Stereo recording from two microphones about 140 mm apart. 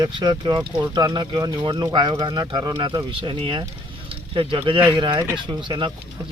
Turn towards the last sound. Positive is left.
turn(degrees=-35)  # may be behind; listen again after turning